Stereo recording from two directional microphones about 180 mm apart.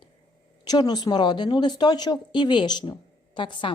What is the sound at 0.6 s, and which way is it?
Speech, 20° left (ahead or behind).